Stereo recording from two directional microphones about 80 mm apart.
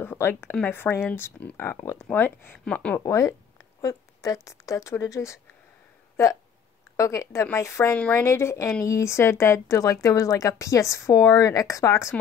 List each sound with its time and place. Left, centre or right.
0.0 s speech: left
2.6 s speech: centre
3.1 s speech: left
7.0 s speech: left
7.9 s a woman's voice: left